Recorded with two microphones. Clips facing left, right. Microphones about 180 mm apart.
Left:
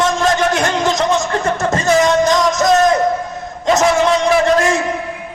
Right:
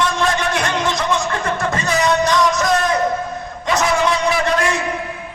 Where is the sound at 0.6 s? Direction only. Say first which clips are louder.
Left 4 dB; 45° left (ahead or behind).